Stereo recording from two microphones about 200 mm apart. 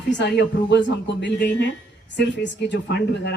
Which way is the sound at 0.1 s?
60° left (ahead or behind).